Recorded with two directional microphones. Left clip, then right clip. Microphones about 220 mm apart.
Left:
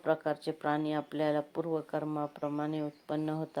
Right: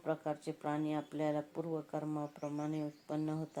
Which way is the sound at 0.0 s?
30° left (ahead or behind).